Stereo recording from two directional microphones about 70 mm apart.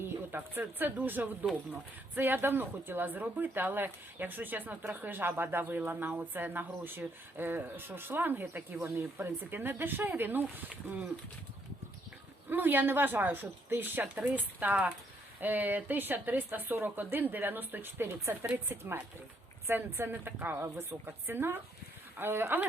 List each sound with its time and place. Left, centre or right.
0.3 s speech: right
12.5 s speech: right